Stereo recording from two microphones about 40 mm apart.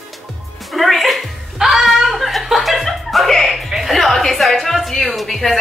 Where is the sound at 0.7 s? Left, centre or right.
Centre.